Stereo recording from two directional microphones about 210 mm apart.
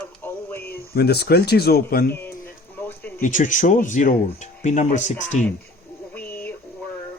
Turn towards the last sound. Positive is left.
turn(degrees=10)  # may be behind; listen again after turning